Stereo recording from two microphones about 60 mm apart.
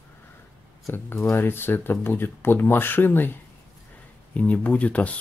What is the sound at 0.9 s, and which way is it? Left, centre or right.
Speech, left.